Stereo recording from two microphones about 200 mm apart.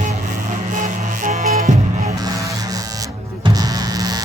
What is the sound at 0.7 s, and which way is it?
Music, 40° right (ahead or behind).